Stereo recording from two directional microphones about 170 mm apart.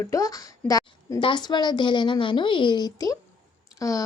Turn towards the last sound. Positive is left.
turn(degrees=20)  # may be behind; listen again after turning